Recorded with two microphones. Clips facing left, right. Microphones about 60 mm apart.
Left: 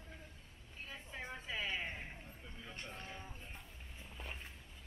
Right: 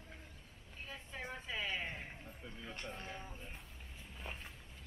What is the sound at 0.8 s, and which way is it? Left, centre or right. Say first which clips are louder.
Vehicle: even; centre.